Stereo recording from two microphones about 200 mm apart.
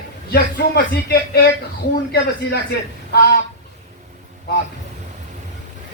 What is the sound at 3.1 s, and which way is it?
Speech, 50° left (ahead or behind).